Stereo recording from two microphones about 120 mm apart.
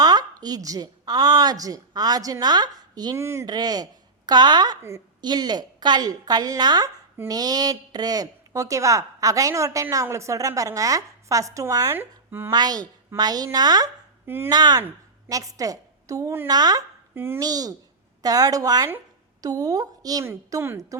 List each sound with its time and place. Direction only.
0.0 s a woman's voice: 35° right (ahead or behind)
3.2 s a woman's voice: 20° right (ahead or behind)
3.4 s a woman's voice: 35° right (ahead or behind)
12.5 s a woman's voice: 35° right (ahead or behind)
14.3 s a woman's voice: 20° right (ahead or behind)
14.5 s a woman's voice: 35° right (ahead or behind)
16.5 s a woman's voice: 30° right (ahead or behind)
17.2 s a woman's voice: 20° right (ahead or behind)
17.4 s a woman's voice: 30° right (ahead or behind)
20.2 s a woman's voice: 20° right (ahead or behind)